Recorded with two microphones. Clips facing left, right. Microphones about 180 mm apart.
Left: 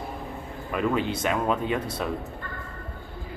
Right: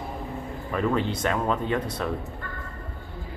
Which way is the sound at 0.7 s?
10° left (ahead or behind).